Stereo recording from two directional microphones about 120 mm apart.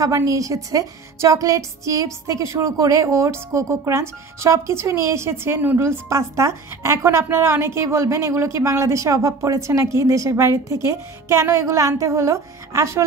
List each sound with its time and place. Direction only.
0.0 s a woman's voice: 30° right (ahead or behind)